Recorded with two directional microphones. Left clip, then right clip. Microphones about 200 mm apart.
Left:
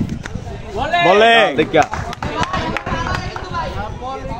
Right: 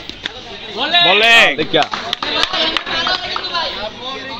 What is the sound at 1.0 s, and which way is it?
Speech, 15° left (ahead or behind).